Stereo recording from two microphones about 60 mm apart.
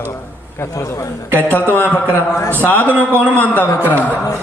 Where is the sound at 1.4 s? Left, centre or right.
Left.